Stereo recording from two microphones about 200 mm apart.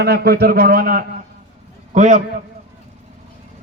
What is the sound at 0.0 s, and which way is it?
A man's voice, 50° right (ahead or behind).